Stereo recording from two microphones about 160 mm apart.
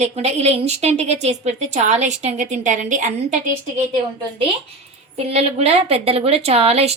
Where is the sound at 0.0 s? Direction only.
40° right (ahead or behind).